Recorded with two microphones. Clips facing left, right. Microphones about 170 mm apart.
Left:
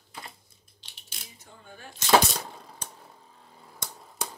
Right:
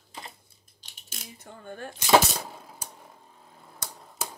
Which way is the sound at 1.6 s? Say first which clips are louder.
Right 9 dB; 55° right (ahead or behind).